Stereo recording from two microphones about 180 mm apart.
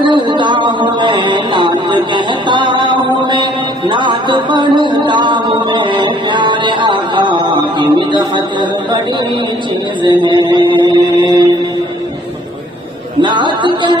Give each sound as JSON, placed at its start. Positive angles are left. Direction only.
{"t": 0.0, "sound": "music", "side_deg": -25}
{"t": 10.0, "sound": "mantra", "side_deg": -25}
{"t": 13.2, "sound": "music", "side_deg": -25}